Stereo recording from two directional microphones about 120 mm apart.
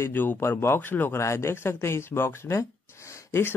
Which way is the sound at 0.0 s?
15° left (ahead or behind).